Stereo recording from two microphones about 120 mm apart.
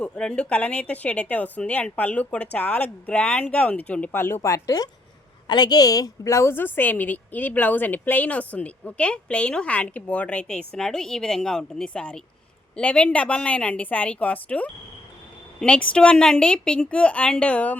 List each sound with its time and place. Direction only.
0.0 s a woman's voice: 10° left (ahead or behind)